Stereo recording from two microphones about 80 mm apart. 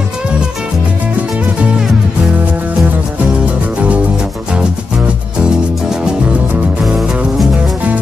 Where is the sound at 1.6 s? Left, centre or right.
Centre.